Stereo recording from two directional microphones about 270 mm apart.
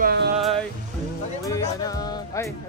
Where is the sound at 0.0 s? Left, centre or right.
Right.